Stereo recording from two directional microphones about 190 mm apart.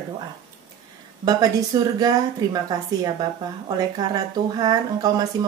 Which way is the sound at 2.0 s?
20° right (ahead or behind).